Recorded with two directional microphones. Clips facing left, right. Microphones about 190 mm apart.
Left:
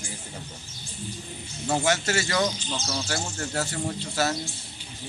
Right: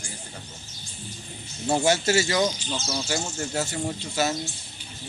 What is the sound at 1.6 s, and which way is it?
Speech, 30° right (ahead or behind).